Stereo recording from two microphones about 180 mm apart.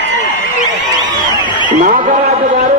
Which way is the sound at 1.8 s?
45° right (ahead or behind).